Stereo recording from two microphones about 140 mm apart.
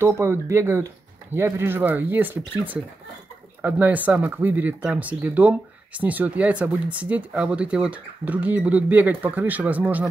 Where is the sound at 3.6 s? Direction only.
10° right (ahead or behind).